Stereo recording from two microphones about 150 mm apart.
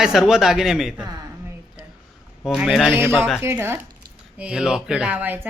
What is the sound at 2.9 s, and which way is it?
A woman's voice, 15° right (ahead or behind).